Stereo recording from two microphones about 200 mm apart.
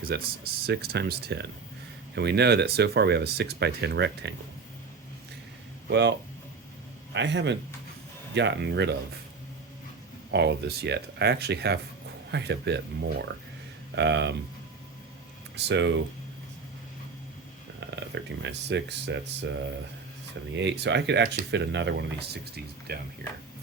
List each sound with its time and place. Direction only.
0.0 s speech: 50° right (ahead or behind)
5.9 s speech: 60° right (ahead or behind)
10.3 s speech: 55° right (ahead or behind)
13.9 s speech: 60° right (ahead or behind)
15.5 s speech: 60° right (ahead or behind)
17.7 s speech: 60° right (ahead or behind)
20.6 s speech: 60° right (ahead or behind)